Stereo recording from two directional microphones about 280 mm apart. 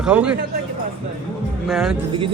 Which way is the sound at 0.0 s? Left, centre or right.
Centre.